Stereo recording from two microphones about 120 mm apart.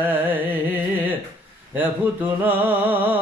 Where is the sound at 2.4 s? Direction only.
15° right (ahead or behind).